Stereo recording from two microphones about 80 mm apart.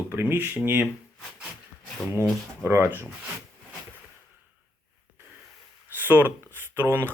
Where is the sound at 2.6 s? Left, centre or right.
Right.